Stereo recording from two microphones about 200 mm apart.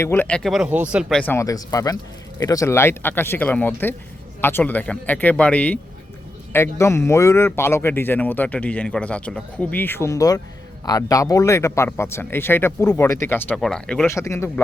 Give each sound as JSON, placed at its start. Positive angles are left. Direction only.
{"t": 0.0, "sound": "speech", "side_deg": 10}
{"t": 1.2, "sound": "speech", "side_deg": 10}